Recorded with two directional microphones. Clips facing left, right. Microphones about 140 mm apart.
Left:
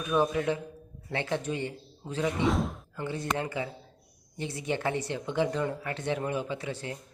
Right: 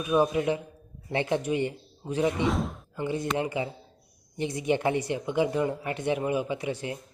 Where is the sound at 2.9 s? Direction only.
15° right (ahead or behind).